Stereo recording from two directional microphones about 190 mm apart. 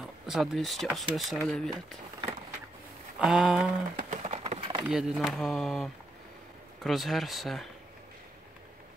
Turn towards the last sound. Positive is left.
turn(degrees=0)  # may be behind; listen again after turning